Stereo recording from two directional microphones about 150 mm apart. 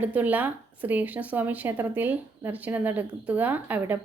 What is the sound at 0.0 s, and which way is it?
A woman's voice, 10° right (ahead or behind).